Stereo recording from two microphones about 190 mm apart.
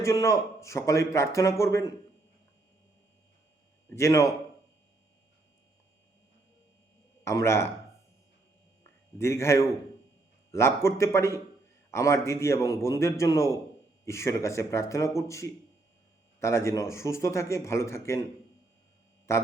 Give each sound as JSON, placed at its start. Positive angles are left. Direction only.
{"t": 0.0, "sound": "speech", "side_deg": 15}
{"t": 3.9, "sound": "speech", "side_deg": 15}
{"t": 7.3, "sound": "speech", "side_deg": 15}
{"t": 9.1, "sound": "speech", "side_deg": 15}
{"t": 19.3, "sound": "speech", "side_deg": 15}